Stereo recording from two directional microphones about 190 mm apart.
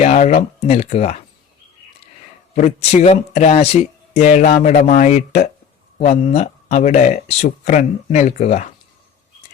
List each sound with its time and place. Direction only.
0.0 s speech: 35° left (ahead or behind)
2.6 s speech: 35° left (ahead or behind)